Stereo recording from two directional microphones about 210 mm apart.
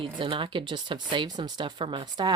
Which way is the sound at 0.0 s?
25° right (ahead or behind).